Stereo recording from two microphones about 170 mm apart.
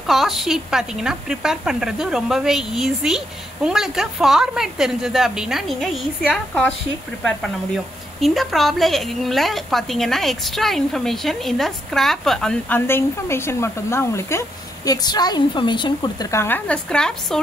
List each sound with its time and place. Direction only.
0.0 s a woman's voice: centre (ahead or behind)
8.2 s a woman's voice: centre (ahead or behind)